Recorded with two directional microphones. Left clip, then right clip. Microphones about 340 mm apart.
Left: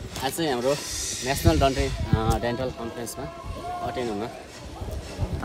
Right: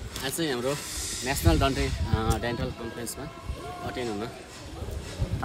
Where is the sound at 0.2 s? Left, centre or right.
Centre.